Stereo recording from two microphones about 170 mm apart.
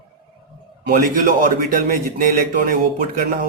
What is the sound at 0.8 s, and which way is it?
A man's voice, 55° right (ahead or behind).